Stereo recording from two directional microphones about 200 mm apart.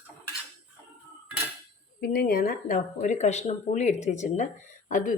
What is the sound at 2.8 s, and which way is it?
Speech, 40° left (ahead or behind).